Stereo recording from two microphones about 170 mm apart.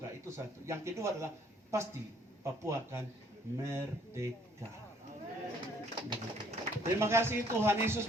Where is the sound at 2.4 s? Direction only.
15° right (ahead or behind).